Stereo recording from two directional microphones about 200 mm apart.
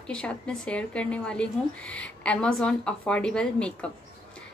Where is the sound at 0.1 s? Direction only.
5° left (ahead or behind).